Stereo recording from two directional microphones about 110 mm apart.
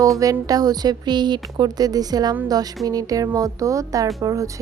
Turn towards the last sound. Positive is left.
turn(degrees=-30)  # may be behind; listen again after turning